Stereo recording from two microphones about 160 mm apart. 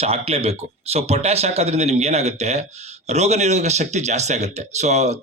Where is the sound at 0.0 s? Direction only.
40° right (ahead or behind).